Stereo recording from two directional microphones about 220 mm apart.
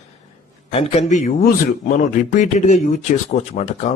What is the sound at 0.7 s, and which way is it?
A man's voice, 25° left (ahead or behind).